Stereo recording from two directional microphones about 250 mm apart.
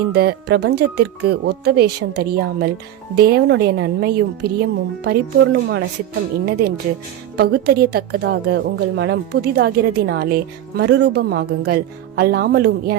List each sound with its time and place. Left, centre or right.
0.1 s a woman's voice: right